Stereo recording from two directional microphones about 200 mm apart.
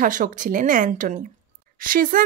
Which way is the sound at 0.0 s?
40° right (ahead or behind).